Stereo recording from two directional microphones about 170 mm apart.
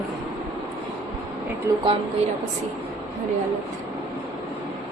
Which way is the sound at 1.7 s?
15° right (ahead or behind).